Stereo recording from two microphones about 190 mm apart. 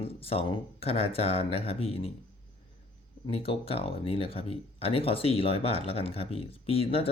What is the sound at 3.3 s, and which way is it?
Speech, 30° left (ahead or behind).